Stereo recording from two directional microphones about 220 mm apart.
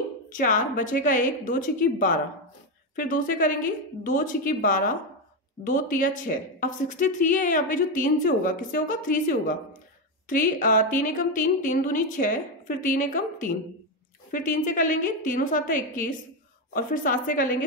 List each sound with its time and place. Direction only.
0.3 s a woman's voice: 35° left (ahead or behind)